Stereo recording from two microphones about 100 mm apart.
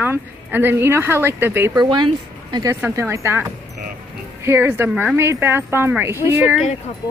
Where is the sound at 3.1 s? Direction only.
25° right (ahead or behind).